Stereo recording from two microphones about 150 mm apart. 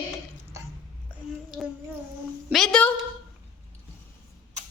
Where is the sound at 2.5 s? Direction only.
5° left (ahead or behind).